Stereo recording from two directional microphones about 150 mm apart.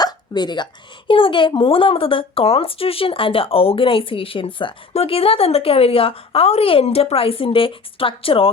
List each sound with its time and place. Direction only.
0.0 s a woman's voice: 30° left (ahead or behind)